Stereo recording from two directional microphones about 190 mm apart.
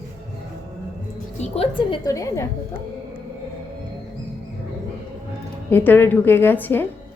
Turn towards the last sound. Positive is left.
turn(degrees=10)  # may be behind; listen again after turning